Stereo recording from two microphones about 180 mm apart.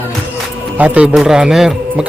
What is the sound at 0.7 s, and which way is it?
Speech, 10° right (ahead or behind).